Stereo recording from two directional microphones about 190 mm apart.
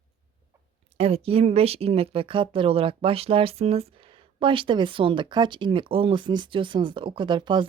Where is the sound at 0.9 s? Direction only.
30° right (ahead or behind).